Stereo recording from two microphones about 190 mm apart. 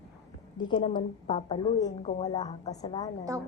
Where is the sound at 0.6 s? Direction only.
25° left (ahead or behind).